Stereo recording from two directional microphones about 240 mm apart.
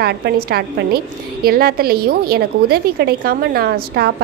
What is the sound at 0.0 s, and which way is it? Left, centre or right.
A woman's voice, right.